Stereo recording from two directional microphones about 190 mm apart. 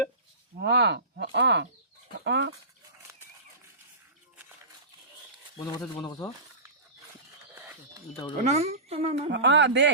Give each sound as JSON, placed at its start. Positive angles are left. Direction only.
{"t": 0.5, "sound": "speech", "side_deg": -60}
{"t": 6.0, "sound": "speech", "side_deg": 20}
{"t": 8.4, "sound": "a woman's voice", "side_deg": -35}
{"t": 9.3, "sound": "speech", "side_deg": -70}